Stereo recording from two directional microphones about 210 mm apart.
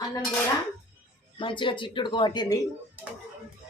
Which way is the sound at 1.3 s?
25° left (ahead or behind).